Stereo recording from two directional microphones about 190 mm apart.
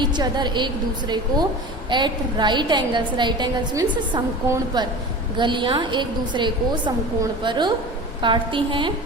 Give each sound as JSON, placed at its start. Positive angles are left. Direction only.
{"t": 0.0, "sound": "a woman's voice", "side_deg": -25}